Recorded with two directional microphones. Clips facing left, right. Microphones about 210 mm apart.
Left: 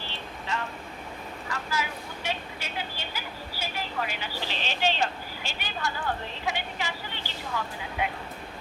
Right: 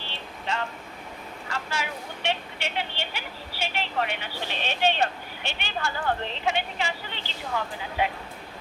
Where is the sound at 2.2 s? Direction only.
70° right (ahead or behind).